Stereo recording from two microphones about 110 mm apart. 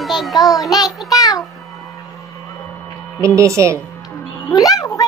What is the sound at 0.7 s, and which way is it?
Child singing, 35° left (ahead or behind).